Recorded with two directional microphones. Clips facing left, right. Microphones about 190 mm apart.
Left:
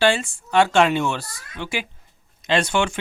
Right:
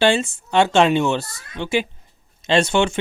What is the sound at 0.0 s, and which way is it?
Speech, 25° right (ahead or behind).